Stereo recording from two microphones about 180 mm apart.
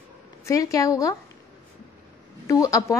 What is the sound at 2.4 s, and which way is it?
Speech, 20° left (ahead or behind).